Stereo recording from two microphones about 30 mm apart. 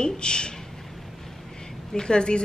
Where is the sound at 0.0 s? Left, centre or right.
Left.